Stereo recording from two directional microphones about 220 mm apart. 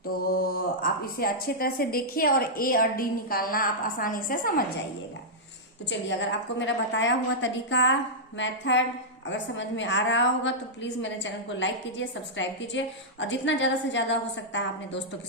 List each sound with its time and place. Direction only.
0.2 s a woman's voice: 40° left (ahead or behind)
6.1 s a woman's voice: 55° left (ahead or behind)